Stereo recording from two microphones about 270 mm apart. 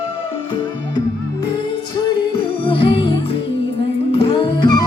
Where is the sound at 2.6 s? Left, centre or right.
Centre.